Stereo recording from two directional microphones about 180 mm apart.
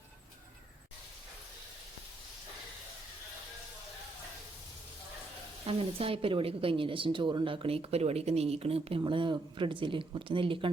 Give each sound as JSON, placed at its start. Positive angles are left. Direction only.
{"t": 5.6, "sound": "a woman's voice", "side_deg": -30}